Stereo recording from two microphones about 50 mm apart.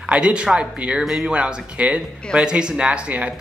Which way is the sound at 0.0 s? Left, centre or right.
Centre.